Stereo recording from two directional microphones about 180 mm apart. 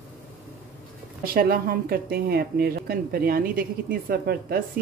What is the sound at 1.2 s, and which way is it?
Speech, 55° right (ahead or behind).